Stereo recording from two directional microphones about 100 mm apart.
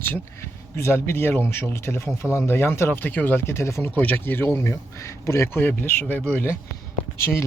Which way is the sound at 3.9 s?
15° left (ahead or behind).